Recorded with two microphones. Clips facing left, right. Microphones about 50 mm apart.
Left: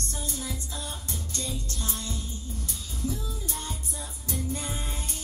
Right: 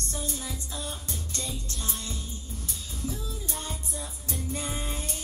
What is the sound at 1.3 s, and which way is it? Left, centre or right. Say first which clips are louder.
Music: left 2 dB; right.